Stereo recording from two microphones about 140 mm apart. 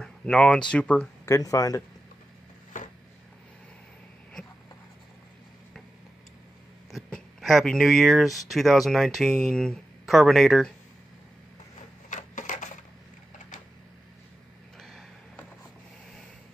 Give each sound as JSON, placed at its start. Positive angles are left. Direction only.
{"t": 0.0, "sound": "speech", "side_deg": 5}
{"t": 1.2, "sound": "speech", "side_deg": 25}
{"t": 6.9, "sound": "speech", "side_deg": 0}
{"t": 12.1, "sound": "typewriter", "side_deg": 65}
{"t": 14.8, "sound": "a sound", "side_deg": 0}